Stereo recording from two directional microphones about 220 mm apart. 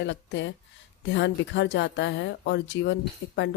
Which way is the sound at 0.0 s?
55° left (ahead or behind).